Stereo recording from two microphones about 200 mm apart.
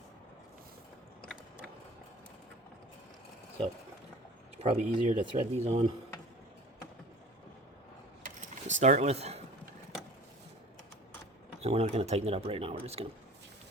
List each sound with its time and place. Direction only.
4.5 s speech: 35° right (ahead or behind)
8.2 s keys jangling: 35° right (ahead or behind)
11.6 s speech: 30° right (ahead or behind)